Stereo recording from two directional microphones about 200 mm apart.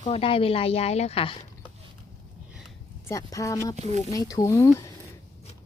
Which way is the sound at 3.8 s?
35° right (ahead or behind).